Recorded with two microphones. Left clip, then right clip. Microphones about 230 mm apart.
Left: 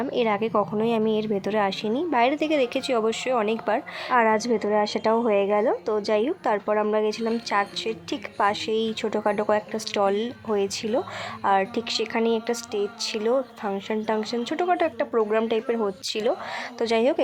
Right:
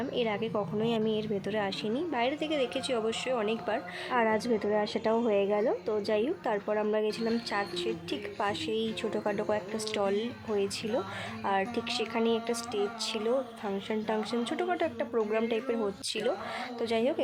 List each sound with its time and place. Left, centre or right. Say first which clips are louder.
0.0 s a woman's voice: left 8 dB; centre